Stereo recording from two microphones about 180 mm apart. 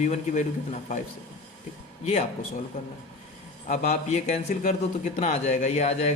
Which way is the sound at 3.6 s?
40° left (ahead or behind).